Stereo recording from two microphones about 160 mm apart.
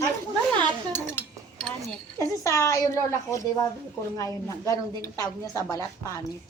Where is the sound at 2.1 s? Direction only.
20° left (ahead or behind).